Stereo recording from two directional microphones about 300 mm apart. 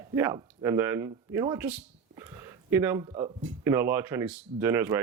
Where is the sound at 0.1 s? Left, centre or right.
Centre.